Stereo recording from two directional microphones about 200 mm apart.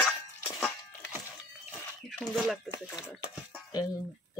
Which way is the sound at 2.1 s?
Centre (ahead or behind).